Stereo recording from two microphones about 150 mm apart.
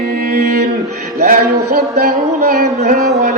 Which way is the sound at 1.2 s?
90° right.